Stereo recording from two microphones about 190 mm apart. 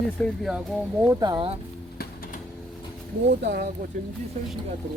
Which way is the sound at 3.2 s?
60° right (ahead or behind).